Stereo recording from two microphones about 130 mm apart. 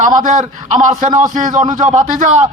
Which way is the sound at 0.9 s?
30° right (ahead or behind).